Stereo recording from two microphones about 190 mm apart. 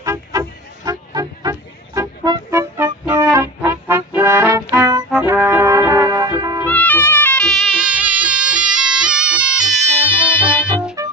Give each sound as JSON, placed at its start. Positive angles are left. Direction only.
{"t": 0.0, "sound": "music", "side_deg": -15}
{"t": 5.1, "sound": "brass instrument", "side_deg": -10}
{"t": 6.7, "sound": "music", "side_deg": 10}
{"t": 11.0, "sound": "music", "side_deg": -15}